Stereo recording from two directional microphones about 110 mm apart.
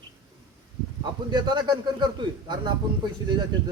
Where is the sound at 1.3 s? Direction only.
40° right (ahead or behind).